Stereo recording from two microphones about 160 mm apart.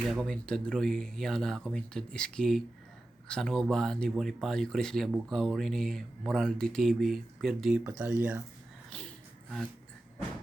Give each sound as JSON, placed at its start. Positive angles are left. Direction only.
{"t": 0.1, "sound": "speech", "side_deg": 5}